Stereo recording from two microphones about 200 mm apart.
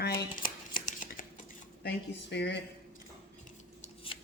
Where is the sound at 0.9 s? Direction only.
40° left (ahead or behind).